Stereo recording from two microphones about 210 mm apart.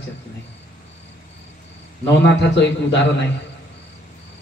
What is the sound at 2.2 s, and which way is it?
Mantra, 55° left (ahead or behind).